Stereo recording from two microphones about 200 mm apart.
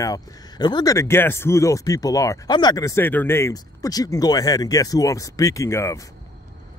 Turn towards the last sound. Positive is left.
turn(degrees=15)  # may be behind; listen again after turning